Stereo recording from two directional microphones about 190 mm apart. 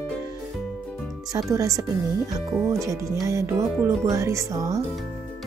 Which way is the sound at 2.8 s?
15° right (ahead or behind).